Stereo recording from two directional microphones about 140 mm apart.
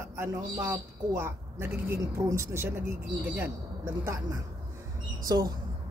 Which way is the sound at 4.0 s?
25° right (ahead or behind).